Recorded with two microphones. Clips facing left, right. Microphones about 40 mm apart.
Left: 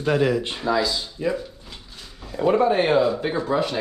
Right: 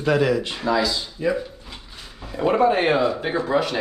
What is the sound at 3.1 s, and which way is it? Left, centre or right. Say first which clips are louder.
Speech: right 1 dB; centre.